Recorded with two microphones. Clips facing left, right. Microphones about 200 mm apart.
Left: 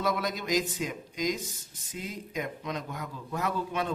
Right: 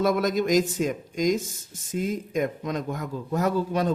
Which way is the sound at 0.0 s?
45° right (ahead or behind).